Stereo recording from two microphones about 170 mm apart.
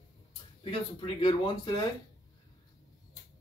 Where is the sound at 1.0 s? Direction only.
30° left (ahead or behind).